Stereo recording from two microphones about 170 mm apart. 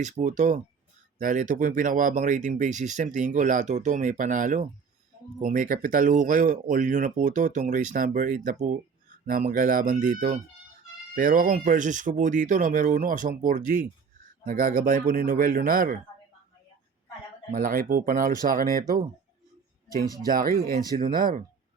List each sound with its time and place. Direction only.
0.0 s speech: 45° right (ahead or behind)
17.5 s speech: 55° right (ahead or behind)
20.7 s speech: 60° right (ahead or behind)